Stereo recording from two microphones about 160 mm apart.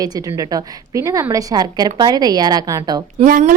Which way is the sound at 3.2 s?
60° right (ahead or behind).